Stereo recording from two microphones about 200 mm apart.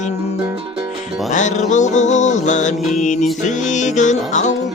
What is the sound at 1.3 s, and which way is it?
Music, 35° left (ahead or behind).